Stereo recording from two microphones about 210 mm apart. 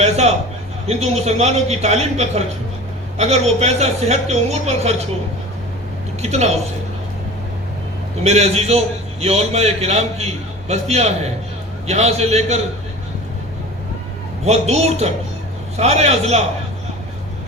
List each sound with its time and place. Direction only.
0.0 s a man's voice: 30° right (ahead or behind)
6.2 s a woman's voice: 30° right (ahead or behind)
8.2 s a woman's voice: 30° right (ahead or behind)
14.4 s a woman's voice: 30° right (ahead or behind)